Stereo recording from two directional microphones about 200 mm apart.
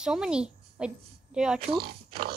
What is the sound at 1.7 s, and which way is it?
Speech, 50° right (ahead or behind).